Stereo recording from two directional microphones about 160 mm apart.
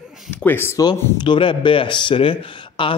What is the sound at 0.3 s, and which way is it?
Speech, 10° left (ahead or behind).